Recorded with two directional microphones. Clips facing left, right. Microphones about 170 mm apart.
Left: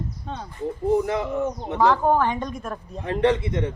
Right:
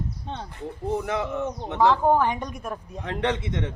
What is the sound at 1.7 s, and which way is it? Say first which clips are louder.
A man's voice: even; 15° right (ahead or behind).